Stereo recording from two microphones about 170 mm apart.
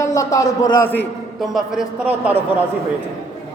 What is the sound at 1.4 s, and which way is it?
Speech, centre (ahead or behind).